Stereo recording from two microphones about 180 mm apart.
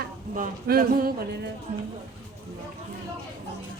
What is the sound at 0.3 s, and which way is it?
Speech, 50° right (ahead or behind).